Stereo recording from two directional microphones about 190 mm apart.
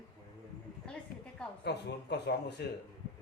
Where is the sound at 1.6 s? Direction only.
60° left (ahead or behind).